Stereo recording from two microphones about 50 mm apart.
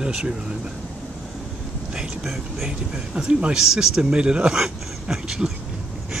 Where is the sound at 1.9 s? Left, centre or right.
Centre.